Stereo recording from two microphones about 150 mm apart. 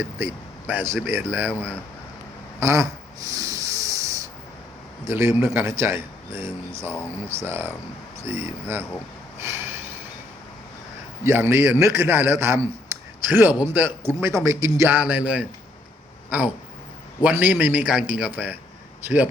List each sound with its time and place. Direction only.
0.0 s a man's voice: 15° right (ahead or behind)
1.5 s speech: 10° left (ahead or behind)
2.6 s a sound: 20° right (ahead or behind)
5.0 s a man's voice: 15° right (ahead or behind)
9.4 s a sound: 15° right (ahead or behind)
11.2 s a man's voice: 15° right (ahead or behind)
17.2 s a man's voice: 10° right (ahead or behind)